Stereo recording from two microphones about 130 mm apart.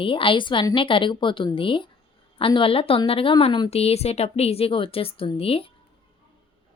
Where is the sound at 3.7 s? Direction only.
50° left (ahead or behind).